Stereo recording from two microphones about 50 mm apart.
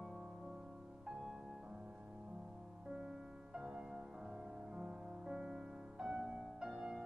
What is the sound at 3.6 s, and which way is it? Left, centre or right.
Music, centre.